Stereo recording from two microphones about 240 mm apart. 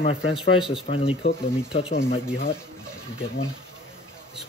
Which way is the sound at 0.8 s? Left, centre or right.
Left.